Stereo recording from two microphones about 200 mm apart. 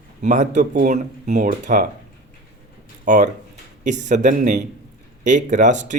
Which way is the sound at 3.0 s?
40° right (ahead or behind).